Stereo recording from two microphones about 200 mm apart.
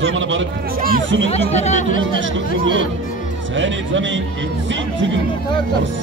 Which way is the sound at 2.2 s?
70° right (ahead or behind).